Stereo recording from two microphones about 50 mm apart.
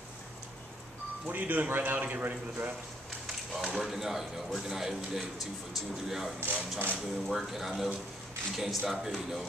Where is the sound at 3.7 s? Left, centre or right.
Centre.